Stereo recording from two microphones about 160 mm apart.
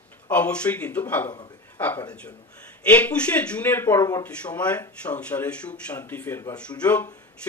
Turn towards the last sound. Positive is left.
turn(degrees=10)  # may be behind; listen again after turning